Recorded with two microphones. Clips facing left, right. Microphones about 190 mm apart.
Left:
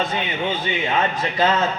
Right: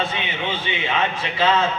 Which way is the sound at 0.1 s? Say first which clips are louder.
Left 3 dB; 40° left (ahead or behind).